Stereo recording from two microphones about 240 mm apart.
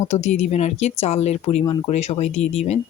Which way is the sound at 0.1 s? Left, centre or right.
Left.